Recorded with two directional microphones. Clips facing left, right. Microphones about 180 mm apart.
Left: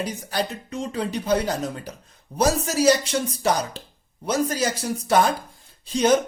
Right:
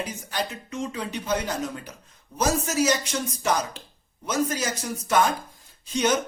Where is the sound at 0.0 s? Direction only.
35° left (ahead or behind).